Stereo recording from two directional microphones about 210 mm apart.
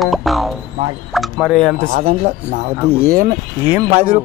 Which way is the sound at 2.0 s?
35° right (ahead or behind).